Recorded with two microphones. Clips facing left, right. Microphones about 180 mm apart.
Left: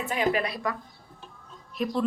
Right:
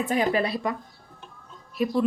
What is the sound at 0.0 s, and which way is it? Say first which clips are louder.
Speech: right 3 dB; 40° right (ahead or behind).